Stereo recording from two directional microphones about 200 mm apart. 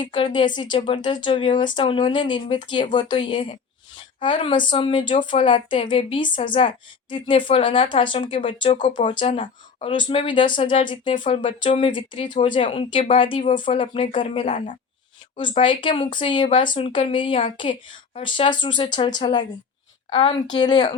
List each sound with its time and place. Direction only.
0.0 s speech: 25° left (ahead or behind)
14.4 s a woman's voice: 40° left (ahead or behind)
15.4 s speech: 25° left (ahead or behind)